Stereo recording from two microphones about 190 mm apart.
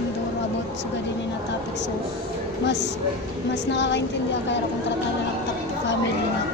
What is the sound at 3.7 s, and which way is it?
Speech, 70° left (ahead or behind).